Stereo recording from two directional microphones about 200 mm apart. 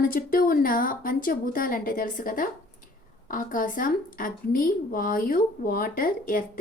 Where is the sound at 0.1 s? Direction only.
45° left (ahead or behind).